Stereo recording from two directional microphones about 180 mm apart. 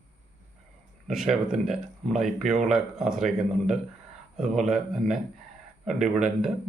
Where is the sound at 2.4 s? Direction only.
40° right (ahead or behind).